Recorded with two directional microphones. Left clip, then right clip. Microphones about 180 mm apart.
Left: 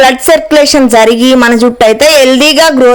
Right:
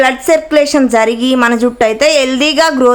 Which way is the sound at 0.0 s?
35° left (ahead or behind).